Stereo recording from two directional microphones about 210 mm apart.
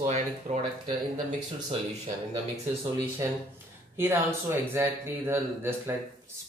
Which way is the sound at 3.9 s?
10° right (ahead or behind).